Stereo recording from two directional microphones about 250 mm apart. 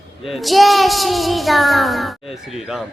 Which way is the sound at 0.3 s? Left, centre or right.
Centre.